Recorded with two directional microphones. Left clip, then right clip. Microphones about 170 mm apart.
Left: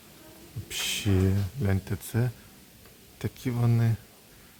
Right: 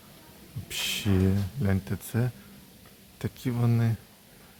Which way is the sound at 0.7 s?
Centre (ahead or behind).